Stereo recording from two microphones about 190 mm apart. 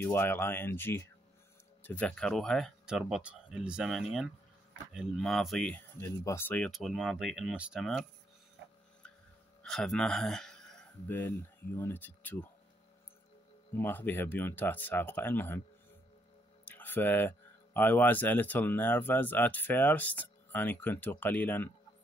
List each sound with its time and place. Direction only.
0.0 s speech: 10° left (ahead or behind)
5.9 s speech: 15° left (ahead or behind)
9.6 s a man's voice: centre (ahead or behind)
13.7 s speech: 10° left (ahead or behind)
16.6 s speech: 10° left (ahead or behind)